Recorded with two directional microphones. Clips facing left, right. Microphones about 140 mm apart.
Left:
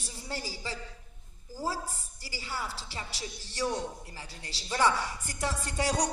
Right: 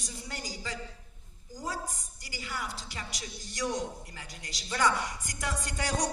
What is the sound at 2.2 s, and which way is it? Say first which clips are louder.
Music: left 1 dB; 30° left (ahead or behind).